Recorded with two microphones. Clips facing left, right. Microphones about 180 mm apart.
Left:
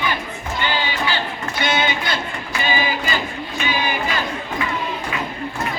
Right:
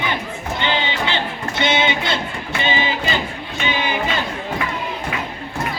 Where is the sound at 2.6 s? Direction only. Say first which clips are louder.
Right 1 dB; 25° right (ahead or behind).